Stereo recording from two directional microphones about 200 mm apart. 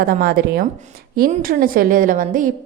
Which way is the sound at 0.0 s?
50° right (ahead or behind).